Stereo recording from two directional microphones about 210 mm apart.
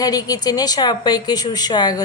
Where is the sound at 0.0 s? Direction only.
15° left (ahead or behind).